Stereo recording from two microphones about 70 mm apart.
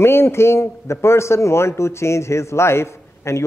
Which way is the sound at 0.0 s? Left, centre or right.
Left.